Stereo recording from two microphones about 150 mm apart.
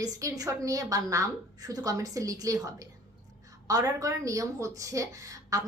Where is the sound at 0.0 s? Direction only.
25° right (ahead or behind).